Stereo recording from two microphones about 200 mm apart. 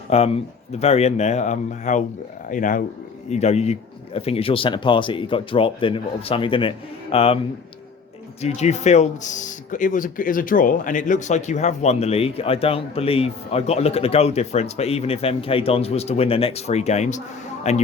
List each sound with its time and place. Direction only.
0.1 s a man's voice: 30° left (ahead or behind)
8.4 s speech: 35° left (ahead or behind)